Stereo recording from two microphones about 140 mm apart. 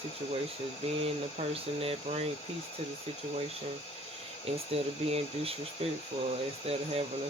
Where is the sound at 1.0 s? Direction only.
45° right (ahead or behind).